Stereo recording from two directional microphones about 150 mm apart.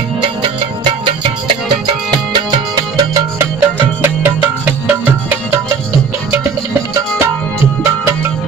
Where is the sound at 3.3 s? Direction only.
15° right (ahead or behind).